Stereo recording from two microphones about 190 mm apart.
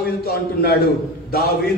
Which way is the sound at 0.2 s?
55° left (ahead or behind).